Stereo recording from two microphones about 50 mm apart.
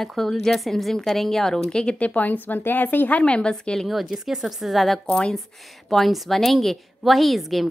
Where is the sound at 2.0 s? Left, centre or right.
Left.